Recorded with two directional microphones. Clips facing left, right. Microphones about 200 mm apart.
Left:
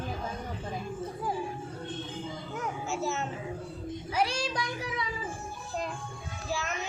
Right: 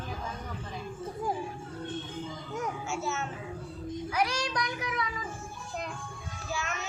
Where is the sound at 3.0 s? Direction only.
35° left (ahead or behind).